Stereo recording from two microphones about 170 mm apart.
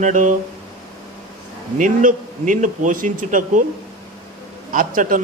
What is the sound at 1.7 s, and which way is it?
A man's voice, 50° right (ahead or behind).